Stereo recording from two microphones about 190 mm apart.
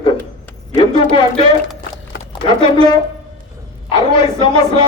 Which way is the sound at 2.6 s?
25° left (ahead or behind).